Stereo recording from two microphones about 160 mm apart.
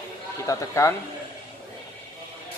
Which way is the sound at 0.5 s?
20° left (ahead or behind).